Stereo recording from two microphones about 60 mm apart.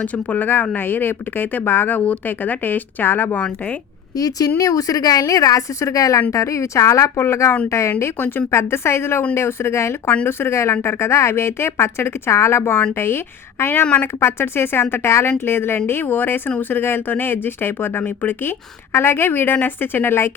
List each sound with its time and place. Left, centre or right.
0.0 s speech: left
4.2 s a woman's voice: left
13.8 s speech: left
14.2 s speech: left